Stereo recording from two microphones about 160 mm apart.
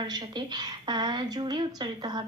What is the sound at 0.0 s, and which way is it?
A woman's voice, 25° right (ahead or behind).